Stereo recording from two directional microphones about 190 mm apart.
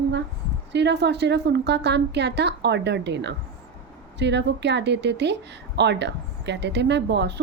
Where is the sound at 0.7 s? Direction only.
65° right (ahead or behind).